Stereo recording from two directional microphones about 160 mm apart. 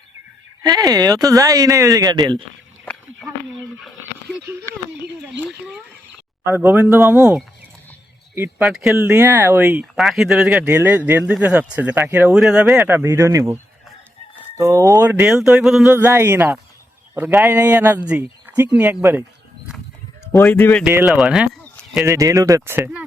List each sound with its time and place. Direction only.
0.6 s speech: 25° right (ahead or behind)
2.8 s a sound: 5° left (ahead or behind)
5.2 s speech: 5° right (ahead or behind)
8.6 s speech: centre (ahead or behind)
9.0 s speech: 15° right (ahead or behind)
9.9 s speech: centre (ahead or behind); by 13.6 s 15° right (ahead or behind)
14.6 s speech: 20° right (ahead or behind)
20.3 s speech: 5° left (ahead or behind)
20.6 s speech: 15° left (ahead or behind)
20.8 s speech: 5° right (ahead or behind)
22.0 s speech: 20° right (ahead or behind)
22.8 s speech: 5° right (ahead or behind)